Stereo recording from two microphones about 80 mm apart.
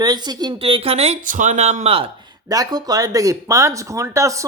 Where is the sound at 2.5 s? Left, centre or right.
Right.